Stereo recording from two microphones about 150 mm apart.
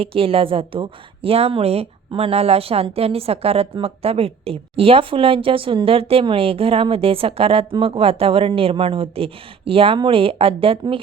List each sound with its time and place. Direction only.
0.0 s a woman's voice: 40° right (ahead or behind)